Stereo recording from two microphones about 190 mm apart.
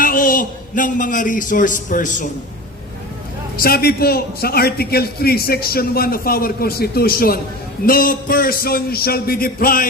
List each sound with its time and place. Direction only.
0.0 s a man's voice: 45° left (ahead or behind)
3.6 s a man's voice: 55° left (ahead or behind)